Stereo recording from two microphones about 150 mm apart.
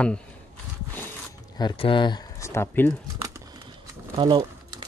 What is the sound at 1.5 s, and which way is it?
Speech, 35° left (ahead or behind).